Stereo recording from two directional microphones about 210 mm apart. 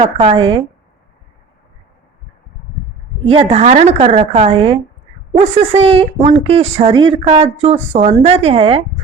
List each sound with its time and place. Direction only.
0.0 s a woman's voice: 25° right (ahead or behind)
3.2 s a woman's voice: 30° right (ahead or behind)